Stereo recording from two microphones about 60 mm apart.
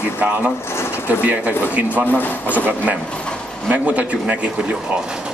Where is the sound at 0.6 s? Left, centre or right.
Left.